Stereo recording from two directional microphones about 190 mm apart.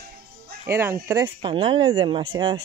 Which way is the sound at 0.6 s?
15° right (ahead or behind).